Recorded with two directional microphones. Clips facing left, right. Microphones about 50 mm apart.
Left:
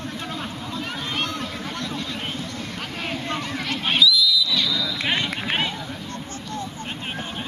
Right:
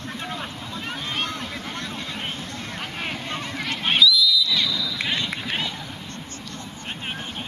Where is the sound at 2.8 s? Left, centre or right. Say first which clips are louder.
Left 1 dB; centre.